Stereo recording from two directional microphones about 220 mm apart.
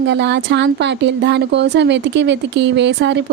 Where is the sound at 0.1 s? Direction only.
50° right (ahead or behind).